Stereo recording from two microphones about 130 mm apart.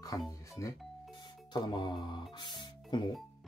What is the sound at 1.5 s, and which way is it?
Speech, 35° left (ahead or behind).